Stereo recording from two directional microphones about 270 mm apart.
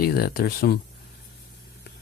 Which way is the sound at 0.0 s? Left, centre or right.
Left.